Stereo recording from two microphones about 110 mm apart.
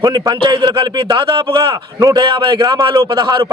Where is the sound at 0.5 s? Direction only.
50° right (ahead or behind).